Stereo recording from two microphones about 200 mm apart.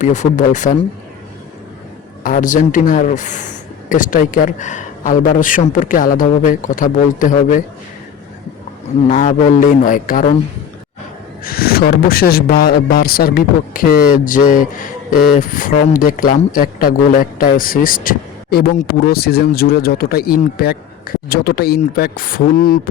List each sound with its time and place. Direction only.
0.0 s speech: 35° left (ahead or behind)
2.2 s speech: 40° left (ahead or behind)
9.1 s speech: 40° left (ahead or behind)
11.4 s speech: 50° left (ahead or behind)